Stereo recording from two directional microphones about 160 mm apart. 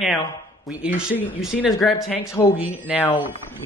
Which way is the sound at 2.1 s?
15° left (ahead or behind).